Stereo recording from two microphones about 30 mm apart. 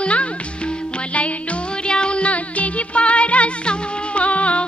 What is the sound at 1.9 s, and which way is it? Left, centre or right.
Music, left.